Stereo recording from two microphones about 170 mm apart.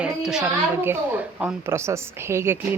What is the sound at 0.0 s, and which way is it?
A woman's voice, 5° right (ahead or behind).